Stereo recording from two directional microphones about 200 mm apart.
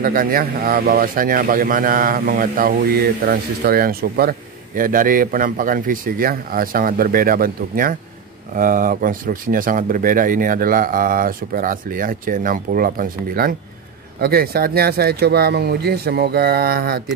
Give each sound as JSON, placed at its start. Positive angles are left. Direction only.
{"t": 0.0, "sound": "a man's voice", "side_deg": -45}